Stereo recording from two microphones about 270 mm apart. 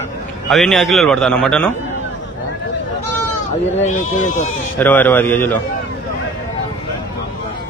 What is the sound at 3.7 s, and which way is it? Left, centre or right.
Speech, left.